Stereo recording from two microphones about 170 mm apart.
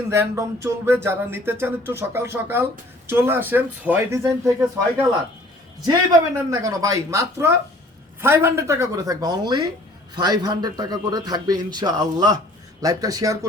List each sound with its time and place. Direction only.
0.1 s speech: 15° right (ahead or behind)
5.8 s a man's voice: 20° right (ahead or behind)